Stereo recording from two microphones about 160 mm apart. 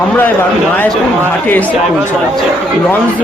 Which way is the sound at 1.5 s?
10° left (ahead or behind).